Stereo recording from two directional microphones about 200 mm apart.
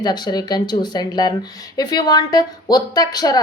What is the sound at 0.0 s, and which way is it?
Speech, 20° left (ahead or behind).